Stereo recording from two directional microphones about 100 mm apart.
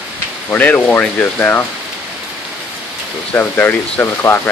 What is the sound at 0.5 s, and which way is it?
Speech, 15° left (ahead or behind).